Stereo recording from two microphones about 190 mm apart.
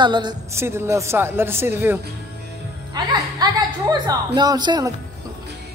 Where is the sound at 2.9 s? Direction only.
20° right (ahead or behind).